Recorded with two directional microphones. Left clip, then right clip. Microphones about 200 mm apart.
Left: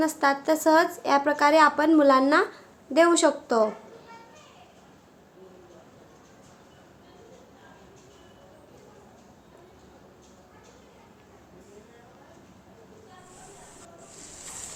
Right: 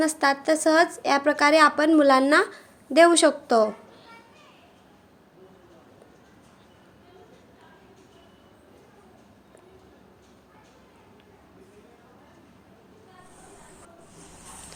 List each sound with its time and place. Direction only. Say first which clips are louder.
0.0 s a woman's voice: right 1 dB; 20° right (ahead or behind)